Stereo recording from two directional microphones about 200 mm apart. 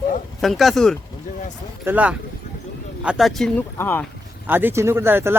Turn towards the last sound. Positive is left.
turn(degrees=-10)  # may be behind; listen again after turning